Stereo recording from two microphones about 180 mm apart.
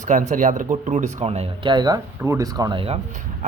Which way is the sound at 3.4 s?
40° right (ahead or behind).